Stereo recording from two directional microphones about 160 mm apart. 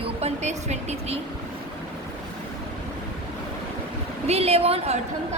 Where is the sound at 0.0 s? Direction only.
40° right (ahead or behind).